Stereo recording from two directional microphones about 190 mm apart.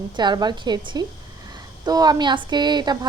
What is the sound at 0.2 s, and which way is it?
A woman's voice, 25° right (ahead or behind).